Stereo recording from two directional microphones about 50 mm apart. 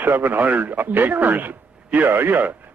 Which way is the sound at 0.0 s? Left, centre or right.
Right.